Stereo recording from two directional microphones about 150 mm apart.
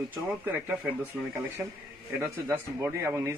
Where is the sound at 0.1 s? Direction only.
15° right (ahead or behind).